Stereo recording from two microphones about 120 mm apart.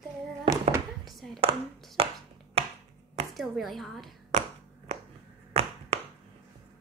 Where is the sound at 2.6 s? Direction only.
55° right (ahead or behind).